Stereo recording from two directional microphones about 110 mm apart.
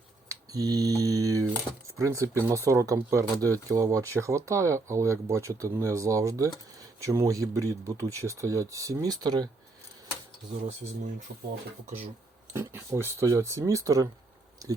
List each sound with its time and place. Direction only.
0.3 s a sound: 35° right (ahead or behind)
2.0 s speech: 25° right (ahead or behind)
12.5 s speech: 25° right (ahead or behind)